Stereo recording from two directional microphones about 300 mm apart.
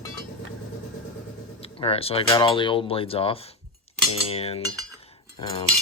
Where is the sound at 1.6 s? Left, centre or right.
Centre.